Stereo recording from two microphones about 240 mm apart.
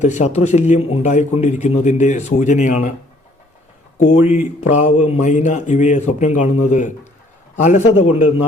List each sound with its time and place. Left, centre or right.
0.0 s speech: left
3.9 s a man's voice: left